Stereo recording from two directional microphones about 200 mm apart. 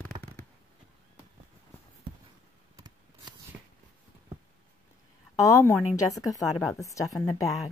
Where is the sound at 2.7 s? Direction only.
20° right (ahead or behind).